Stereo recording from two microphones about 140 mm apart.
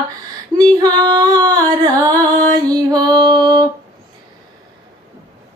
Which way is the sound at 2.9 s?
30° right (ahead or behind).